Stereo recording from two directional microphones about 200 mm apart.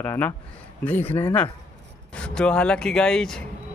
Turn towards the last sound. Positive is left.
turn(degrees=5)  # may be behind; listen again after turning